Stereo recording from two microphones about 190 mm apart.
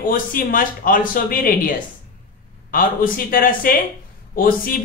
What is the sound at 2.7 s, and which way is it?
Speech, 45° left (ahead or behind).